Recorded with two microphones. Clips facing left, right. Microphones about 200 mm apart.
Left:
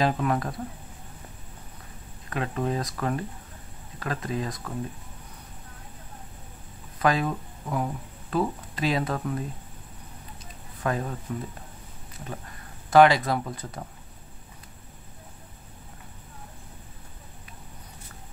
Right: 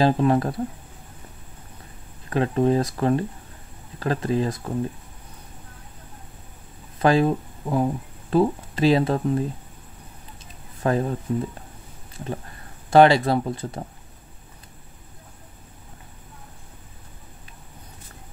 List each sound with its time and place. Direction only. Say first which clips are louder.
0.0 s speech: right 6 dB; 30° right (ahead or behind)
2.2 s speech: right 8 dB; 30° right (ahead or behind)
7.0 s speech: right 6 dB; 30° right (ahead or behind)
10.8 s speech: right 6 dB; 30° right (ahead or behind)
12.9 s speech: right 3 dB; 30° right (ahead or behind)